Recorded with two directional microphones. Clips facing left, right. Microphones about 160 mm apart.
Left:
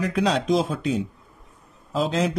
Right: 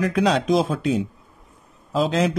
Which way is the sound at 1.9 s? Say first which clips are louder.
Right 3 dB; 75° right (ahead or behind).